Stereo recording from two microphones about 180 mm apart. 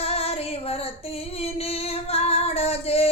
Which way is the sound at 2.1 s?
35° left (ahead or behind).